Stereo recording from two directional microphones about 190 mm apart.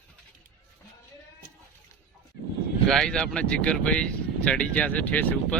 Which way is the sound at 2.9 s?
Centre (ahead or behind).